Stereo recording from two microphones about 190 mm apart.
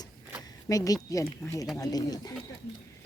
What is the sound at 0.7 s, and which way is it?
Speech, 20° left (ahead or behind).